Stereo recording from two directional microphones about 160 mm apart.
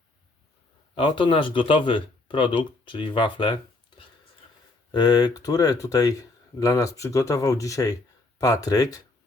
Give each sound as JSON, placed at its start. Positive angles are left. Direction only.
{"t": 0.9, "sound": "speech", "side_deg": 30}